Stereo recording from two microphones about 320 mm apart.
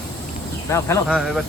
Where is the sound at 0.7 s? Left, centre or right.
Centre.